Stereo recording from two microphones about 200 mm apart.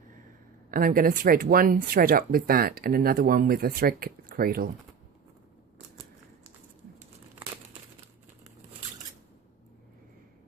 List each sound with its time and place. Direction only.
0.7 s speech: 45° right (ahead or behind)